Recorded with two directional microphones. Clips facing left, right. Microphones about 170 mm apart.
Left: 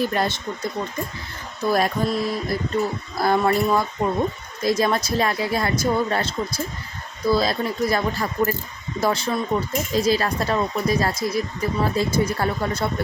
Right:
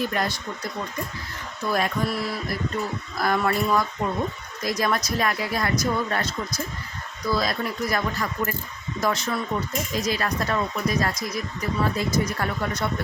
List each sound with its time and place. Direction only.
0.0 s speech: 30° left (ahead or behind)
1.7 s speech: 35° left (ahead or behind)
2.0 s speech: 20° left (ahead or behind)